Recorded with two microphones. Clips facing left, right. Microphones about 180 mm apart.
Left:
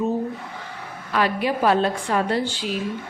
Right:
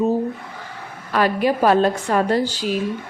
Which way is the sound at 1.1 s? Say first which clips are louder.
Right 4 dB; 45° right (ahead or behind).